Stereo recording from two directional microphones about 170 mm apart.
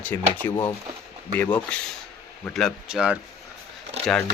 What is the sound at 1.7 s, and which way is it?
Speech, 5° left (ahead or behind).